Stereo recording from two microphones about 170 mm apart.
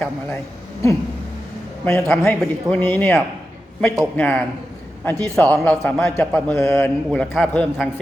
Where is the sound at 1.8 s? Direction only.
5° left (ahead or behind).